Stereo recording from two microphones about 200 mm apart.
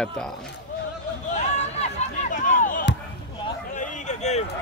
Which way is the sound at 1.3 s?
35° left (ahead or behind).